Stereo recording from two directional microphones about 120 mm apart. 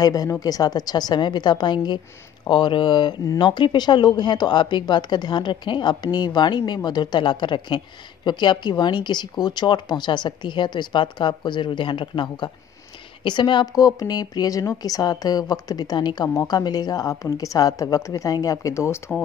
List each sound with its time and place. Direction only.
0.0 s speech: 30° left (ahead or behind)